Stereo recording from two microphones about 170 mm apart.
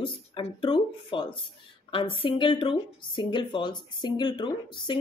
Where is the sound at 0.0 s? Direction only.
30° left (ahead or behind).